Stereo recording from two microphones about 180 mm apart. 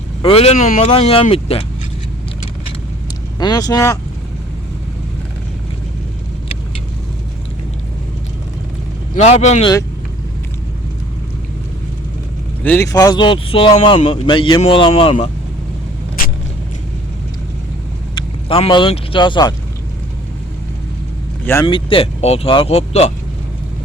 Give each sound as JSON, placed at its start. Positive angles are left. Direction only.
{"t": 0.2, "sound": "speech", "side_deg": 30}
{"t": 3.3, "sound": "speech", "side_deg": 20}
{"t": 9.1, "sound": "speech", "side_deg": 40}
{"t": 12.6, "sound": "speech", "side_deg": 15}
{"t": 18.4, "sound": "speech", "side_deg": 30}
{"t": 21.7, "sound": "speech", "side_deg": 30}